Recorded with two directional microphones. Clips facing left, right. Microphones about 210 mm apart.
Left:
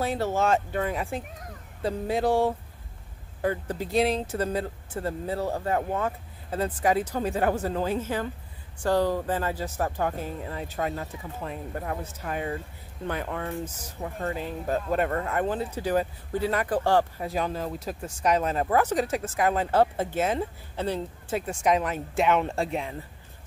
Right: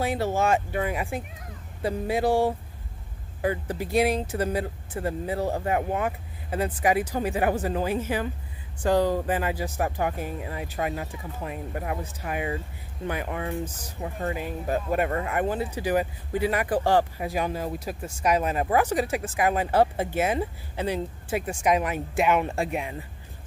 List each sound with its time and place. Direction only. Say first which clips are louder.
0.0 s speech: right 1 dB; 10° right (ahead or behind)